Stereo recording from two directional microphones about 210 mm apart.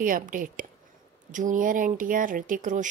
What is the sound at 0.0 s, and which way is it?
Speech, 40° right (ahead or behind).